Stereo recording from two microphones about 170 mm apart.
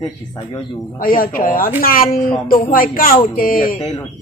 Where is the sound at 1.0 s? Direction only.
55° left (ahead or behind).